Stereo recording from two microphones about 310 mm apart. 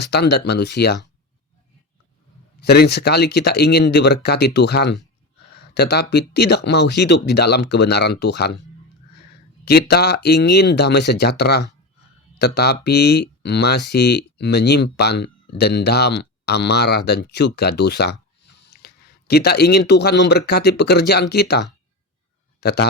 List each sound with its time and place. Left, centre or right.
0.0 s speech: left
2.6 s speech: left
9.6 s speech: left